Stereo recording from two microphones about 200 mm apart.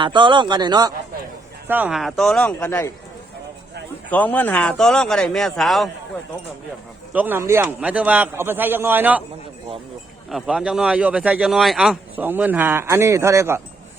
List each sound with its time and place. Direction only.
0.0 s speech: 25° right (ahead or behind)
1.6 s speech: 10° right (ahead or behind); by 2.9 s 15° left (ahead or behind)
4.1 s speech: 10° left (ahead or behind)
7.1 s speech: 10° right (ahead or behind)
10.2 s speech: centre (ahead or behind)